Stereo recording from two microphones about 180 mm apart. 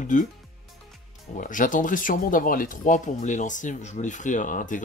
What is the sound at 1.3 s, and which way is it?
Speech, 45° left (ahead or behind).